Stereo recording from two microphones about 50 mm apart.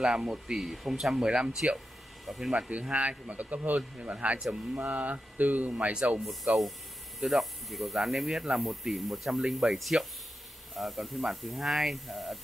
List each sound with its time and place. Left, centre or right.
0.1 s speech: centre
2.2 s speech: centre
2.5 s speech: right
6.4 s speech: centre